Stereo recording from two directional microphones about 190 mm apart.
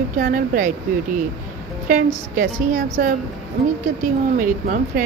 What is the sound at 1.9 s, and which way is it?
A woman's voice, 45° right (ahead or behind).